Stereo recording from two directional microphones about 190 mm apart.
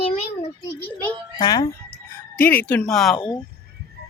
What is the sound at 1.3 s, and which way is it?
Speech, 20° left (ahead or behind).